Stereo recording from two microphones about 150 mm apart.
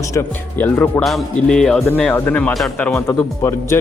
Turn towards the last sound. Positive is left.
turn(degrees=20)  # may be behind; listen again after turning